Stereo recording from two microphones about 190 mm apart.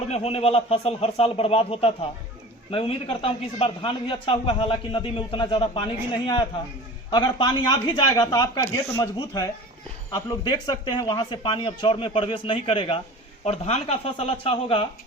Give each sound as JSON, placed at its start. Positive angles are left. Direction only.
{"t": 0.1, "sound": "a man's voice", "side_deg": 30}